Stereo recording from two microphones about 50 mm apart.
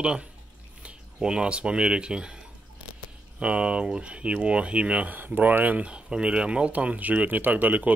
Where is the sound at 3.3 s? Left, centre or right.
Right.